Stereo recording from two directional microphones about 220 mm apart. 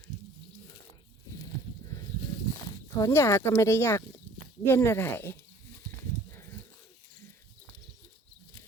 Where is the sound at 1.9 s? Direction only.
15° left (ahead or behind).